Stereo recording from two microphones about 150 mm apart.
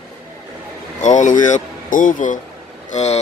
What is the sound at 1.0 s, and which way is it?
Speech, 55° left (ahead or behind).